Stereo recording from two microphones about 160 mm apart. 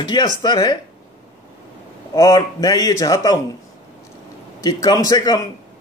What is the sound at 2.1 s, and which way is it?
Speech, 20° left (ahead or behind).